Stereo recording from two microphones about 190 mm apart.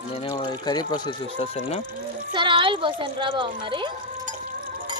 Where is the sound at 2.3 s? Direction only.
25° right (ahead or behind).